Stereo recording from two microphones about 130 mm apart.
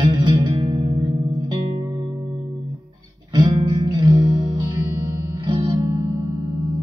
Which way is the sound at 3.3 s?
30° right (ahead or behind).